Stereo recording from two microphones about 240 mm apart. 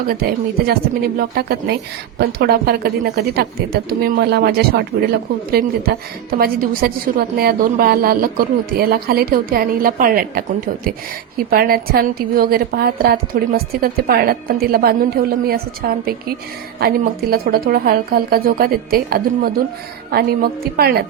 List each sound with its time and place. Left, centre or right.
0.1 s speech: right
11.5 s speech: right